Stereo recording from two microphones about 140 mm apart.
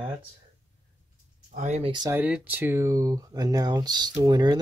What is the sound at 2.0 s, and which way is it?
Speech, 10° right (ahead or behind).